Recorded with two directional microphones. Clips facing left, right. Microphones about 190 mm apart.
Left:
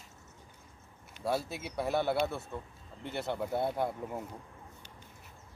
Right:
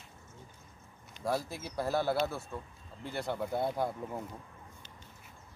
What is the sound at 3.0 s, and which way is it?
Speech, centre (ahead or behind).